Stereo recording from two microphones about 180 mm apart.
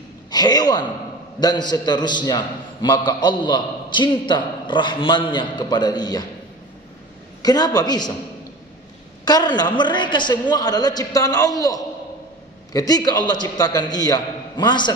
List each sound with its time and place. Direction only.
0.3 s a sound: 20° left (ahead or behind)
1.4 s a man's voice: 20° left (ahead or behind)
7.4 s a man's voice: 20° left (ahead or behind)
9.2 s a man's voice: 25° left (ahead or behind)